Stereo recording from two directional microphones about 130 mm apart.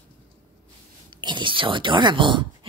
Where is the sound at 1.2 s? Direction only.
40° right (ahead or behind).